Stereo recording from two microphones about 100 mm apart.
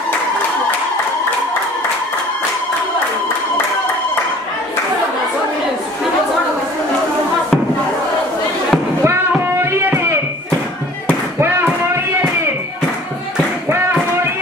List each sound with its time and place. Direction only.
9.0 s music: 25° right (ahead or behind)
11.3 s music: 25° right (ahead or behind)
13.7 s a sound: 25° right (ahead or behind)